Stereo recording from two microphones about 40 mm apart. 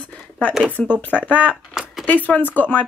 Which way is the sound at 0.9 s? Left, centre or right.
Left.